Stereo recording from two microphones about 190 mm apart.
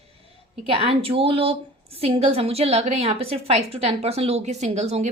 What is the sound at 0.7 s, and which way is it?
A woman's voice, 30° right (ahead or behind).